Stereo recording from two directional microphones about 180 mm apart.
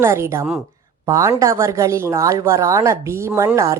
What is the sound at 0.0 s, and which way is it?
A woman's voice, 15° right (ahead or behind).